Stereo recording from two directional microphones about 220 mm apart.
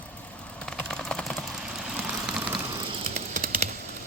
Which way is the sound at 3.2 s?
40° right (ahead or behind).